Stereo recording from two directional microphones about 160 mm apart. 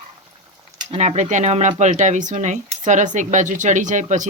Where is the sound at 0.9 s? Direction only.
45° right (ahead or behind).